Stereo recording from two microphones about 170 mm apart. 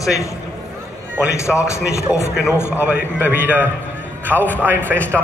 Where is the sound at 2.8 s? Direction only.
10° right (ahead or behind).